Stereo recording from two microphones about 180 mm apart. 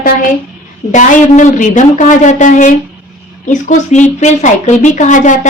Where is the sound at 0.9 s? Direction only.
45° left (ahead or behind).